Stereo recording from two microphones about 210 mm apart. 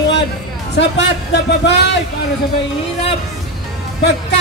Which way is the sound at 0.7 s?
55° left (ahead or behind).